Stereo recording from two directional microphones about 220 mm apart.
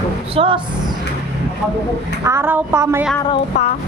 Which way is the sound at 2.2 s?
10° right (ahead or behind).